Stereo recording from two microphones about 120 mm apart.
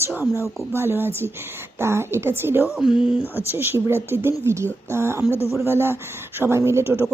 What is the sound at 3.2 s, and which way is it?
Speech, 20° left (ahead or behind).